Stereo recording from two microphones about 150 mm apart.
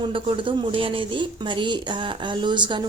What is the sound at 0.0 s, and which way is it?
A woman's voice, 35° right (ahead or behind).